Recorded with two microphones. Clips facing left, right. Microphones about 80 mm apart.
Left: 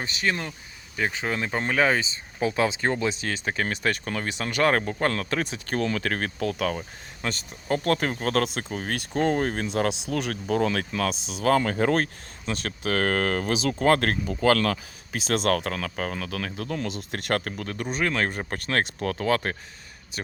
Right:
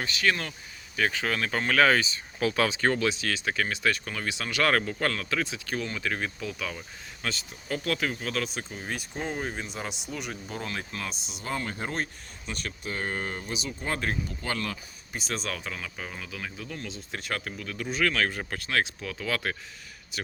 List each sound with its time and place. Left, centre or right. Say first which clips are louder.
0.0 s speech: even; left
3.7 s speech: left 2 dB; left
5.8 s speech: left 6 dB; left
7.2 s speech: left 3 dB; left
17.8 s speech: left 1 dB; left
18.3 s speech: left 3 dB; left
18.9 s speech: left 8 dB; left